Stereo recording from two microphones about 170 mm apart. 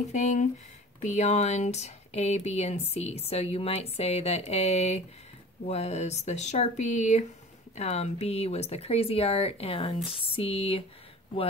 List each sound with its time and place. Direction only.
0.1 s speech: 45° left (ahead or behind)